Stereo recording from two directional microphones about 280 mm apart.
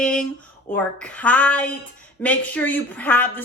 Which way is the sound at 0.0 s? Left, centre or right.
Centre.